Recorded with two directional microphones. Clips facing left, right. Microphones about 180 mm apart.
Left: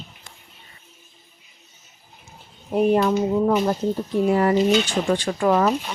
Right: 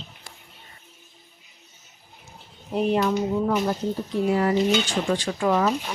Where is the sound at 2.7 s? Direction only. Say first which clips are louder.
Left 4 dB; 50° left (ahead or behind).